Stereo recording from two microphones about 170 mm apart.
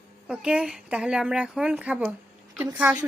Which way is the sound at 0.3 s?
5° right (ahead or behind).